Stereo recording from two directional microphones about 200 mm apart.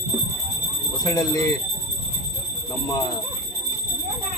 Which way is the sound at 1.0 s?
15° left (ahead or behind).